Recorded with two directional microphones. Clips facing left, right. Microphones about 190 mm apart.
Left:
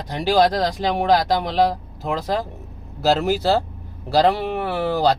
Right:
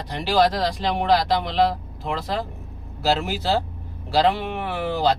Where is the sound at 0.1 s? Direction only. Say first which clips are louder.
Left 3 dB; 45° left (ahead or behind).